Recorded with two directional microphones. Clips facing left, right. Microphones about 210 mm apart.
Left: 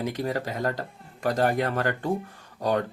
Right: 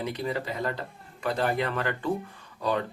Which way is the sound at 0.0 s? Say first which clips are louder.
Left 2 dB; 45° left (ahead or behind).